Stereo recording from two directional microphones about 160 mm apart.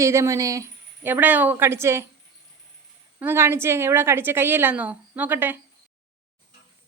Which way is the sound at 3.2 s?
15° right (ahead or behind).